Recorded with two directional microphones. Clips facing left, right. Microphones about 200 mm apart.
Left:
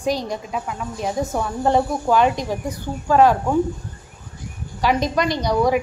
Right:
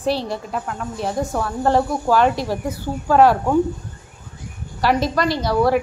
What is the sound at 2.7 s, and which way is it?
Speech, 10° right (ahead or behind).